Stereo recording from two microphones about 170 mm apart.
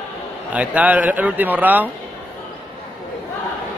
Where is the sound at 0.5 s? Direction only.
10° right (ahead or behind).